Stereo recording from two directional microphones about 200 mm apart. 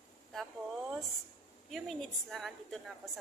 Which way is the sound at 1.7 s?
Centre (ahead or behind).